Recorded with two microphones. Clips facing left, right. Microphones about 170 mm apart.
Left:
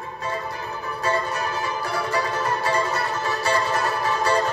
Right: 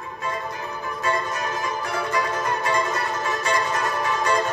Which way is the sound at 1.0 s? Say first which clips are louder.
Left 1 dB; 35° left (ahead or behind).